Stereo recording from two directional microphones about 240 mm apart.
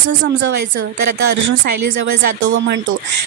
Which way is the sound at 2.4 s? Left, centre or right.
Right.